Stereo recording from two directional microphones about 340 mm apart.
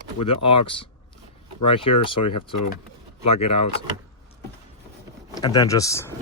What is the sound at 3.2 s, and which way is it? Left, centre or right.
Speech, centre.